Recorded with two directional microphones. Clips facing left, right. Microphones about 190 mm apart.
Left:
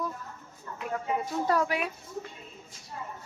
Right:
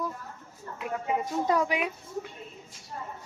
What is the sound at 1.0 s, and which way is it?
Speech, 15° right (ahead or behind).